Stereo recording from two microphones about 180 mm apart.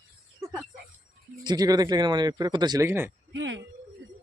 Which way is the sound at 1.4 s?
20° right (ahead or behind).